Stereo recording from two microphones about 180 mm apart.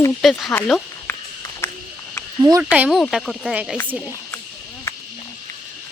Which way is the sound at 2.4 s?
20° right (ahead or behind).